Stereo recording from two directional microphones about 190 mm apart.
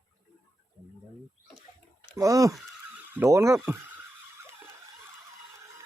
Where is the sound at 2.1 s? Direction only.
20° right (ahead or behind).